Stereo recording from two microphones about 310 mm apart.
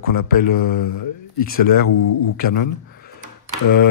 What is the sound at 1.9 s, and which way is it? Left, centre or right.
Speech, left.